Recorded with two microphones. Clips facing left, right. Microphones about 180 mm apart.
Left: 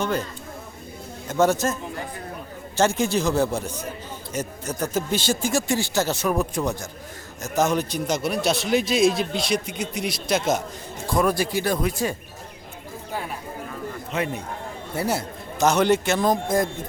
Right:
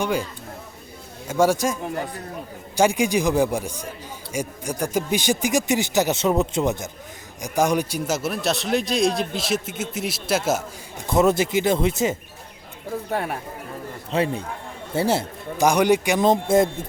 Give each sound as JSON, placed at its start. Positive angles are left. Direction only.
{"t": 0.0, "sound": "speech", "side_deg": -10}
{"t": 1.3, "sound": "speech", "side_deg": -10}
{"t": 11.1, "sound": "speech", "side_deg": -25}
{"t": 13.1, "sound": "speech", "side_deg": -65}
{"t": 14.1, "sound": "speech", "side_deg": -30}
{"t": 15.5, "sound": "speech", "side_deg": -10}